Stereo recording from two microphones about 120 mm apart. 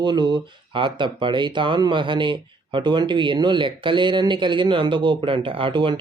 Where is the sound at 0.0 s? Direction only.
40° right (ahead or behind).